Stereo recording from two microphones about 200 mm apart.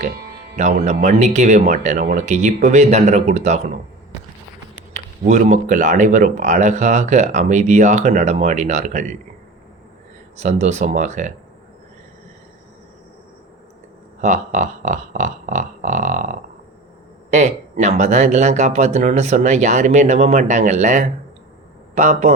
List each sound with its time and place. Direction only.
0.5 s a man's voice: 35° right (ahead or behind)
5.2 s speech: 35° right (ahead or behind)
10.3 s speech: 35° right (ahead or behind)
14.2 s speech: 35° right (ahead or behind)